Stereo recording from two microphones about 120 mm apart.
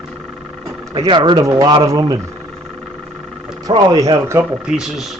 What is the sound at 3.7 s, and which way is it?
Speech, 35° right (ahead or behind).